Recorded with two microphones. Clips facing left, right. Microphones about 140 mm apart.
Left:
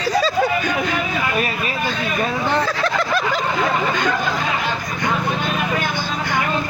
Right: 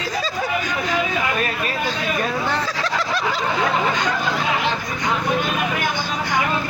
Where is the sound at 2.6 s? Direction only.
55° left (ahead or behind).